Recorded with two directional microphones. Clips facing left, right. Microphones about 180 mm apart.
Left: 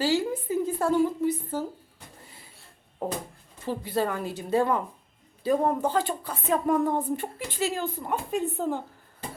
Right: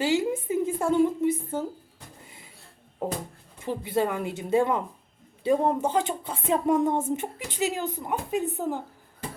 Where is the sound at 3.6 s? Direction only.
20° right (ahead or behind).